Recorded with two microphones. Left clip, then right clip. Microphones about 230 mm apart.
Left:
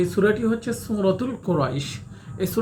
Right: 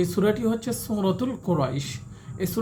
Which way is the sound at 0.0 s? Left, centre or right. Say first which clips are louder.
Left 3 dB; right.